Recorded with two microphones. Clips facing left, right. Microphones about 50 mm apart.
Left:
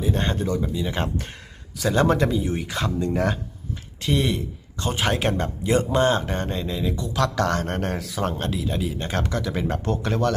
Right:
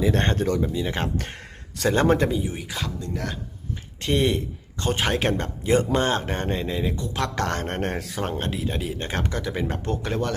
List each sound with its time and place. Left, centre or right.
0.3 s speech: right
0.6 s speech: centre
1.8 s speech: right
2.4 s speech: centre
3.0 s speech: left
4.0 s speech: right